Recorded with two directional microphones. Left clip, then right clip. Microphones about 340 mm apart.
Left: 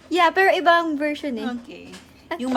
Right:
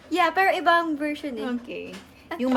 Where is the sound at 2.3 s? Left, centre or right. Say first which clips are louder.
Left 1 dB; left.